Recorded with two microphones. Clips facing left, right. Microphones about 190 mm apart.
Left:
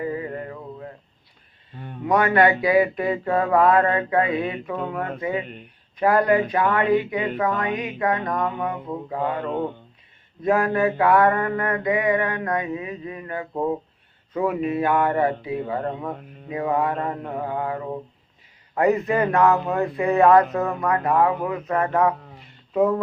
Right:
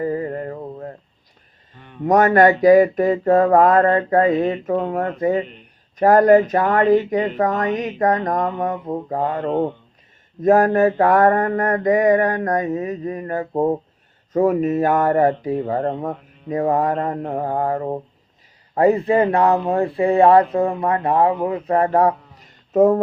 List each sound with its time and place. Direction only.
0.0 s a sound: 40° right (ahead or behind)
2.0 s speech: 45° right (ahead or behind)
18.7 s speech: 30° right (ahead or behind)